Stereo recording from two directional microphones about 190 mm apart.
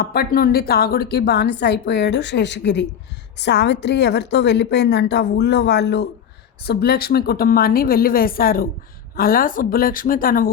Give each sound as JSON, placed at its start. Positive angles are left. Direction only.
{"t": 0.0, "sound": "a woman's voice", "side_deg": 50}